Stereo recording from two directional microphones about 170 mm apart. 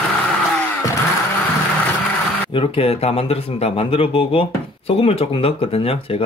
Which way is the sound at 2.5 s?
35° left (ahead or behind).